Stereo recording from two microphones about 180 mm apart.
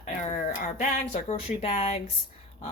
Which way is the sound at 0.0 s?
45° left (ahead or behind).